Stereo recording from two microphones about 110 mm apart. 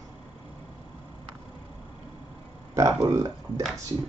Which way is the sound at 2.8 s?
30° right (ahead or behind).